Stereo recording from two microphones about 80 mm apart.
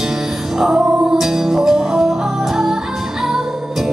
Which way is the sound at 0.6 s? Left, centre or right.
Centre.